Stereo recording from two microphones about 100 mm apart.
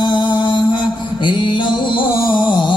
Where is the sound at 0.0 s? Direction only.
50° left (ahead or behind).